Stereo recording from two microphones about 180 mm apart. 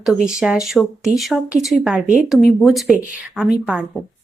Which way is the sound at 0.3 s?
5° right (ahead or behind).